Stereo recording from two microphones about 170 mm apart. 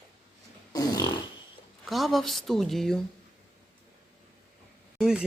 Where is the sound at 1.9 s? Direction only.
Centre (ahead or behind).